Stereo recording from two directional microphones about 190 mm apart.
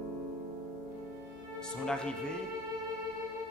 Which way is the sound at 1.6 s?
5° left (ahead or behind).